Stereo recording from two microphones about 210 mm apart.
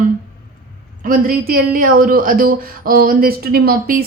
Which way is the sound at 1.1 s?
40° right (ahead or behind).